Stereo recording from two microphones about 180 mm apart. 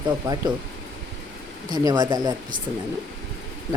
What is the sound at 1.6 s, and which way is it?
Speech, 20° right (ahead or behind).